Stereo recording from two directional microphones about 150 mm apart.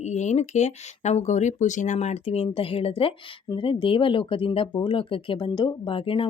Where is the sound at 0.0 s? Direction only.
50° left (ahead or behind).